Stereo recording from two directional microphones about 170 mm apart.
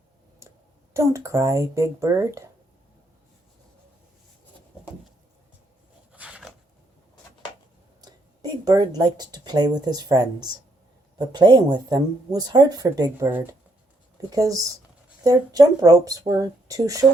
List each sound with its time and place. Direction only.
0.9 s a woman's voice: 15° right (ahead or behind)
6.1 s a sound: 5° right (ahead or behind)
8.0 s speech: 25° right (ahead or behind)